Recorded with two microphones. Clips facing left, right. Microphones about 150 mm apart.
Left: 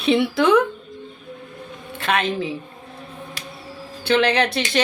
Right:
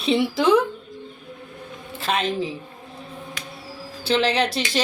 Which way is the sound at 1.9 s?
60° left (ahead or behind).